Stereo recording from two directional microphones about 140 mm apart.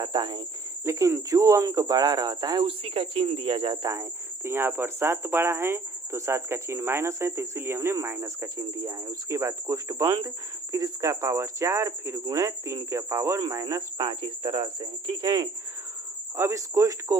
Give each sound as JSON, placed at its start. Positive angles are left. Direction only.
{"t": 0.0, "sound": "speech", "side_deg": -30}
{"t": 0.9, "sound": "speech", "side_deg": -20}
{"t": 4.4, "sound": "speech", "side_deg": -15}